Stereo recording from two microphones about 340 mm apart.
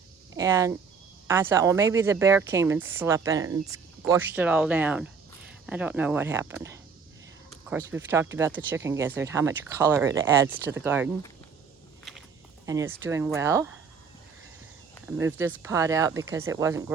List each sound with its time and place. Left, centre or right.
0.3 s a woman's voice: centre
12.1 s walk: centre
12.6 s a woman's voice: centre
15.1 s a woman's voice: centre